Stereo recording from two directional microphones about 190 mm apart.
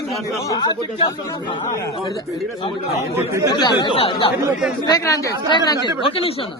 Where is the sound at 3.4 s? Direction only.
25° left (ahead or behind).